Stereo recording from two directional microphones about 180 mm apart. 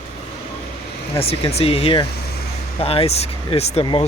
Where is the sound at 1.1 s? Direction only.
35° left (ahead or behind).